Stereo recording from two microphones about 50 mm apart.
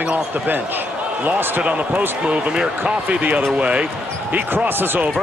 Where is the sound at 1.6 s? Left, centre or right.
Right.